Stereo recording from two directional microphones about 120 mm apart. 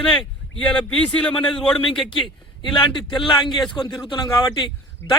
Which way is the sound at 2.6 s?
45° left (ahead or behind).